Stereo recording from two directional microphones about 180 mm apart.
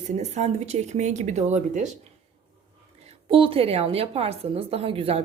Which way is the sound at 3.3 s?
30° right (ahead or behind).